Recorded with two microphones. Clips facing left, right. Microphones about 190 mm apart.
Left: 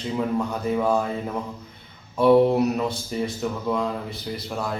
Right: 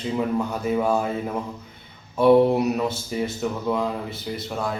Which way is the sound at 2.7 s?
5° right (ahead or behind).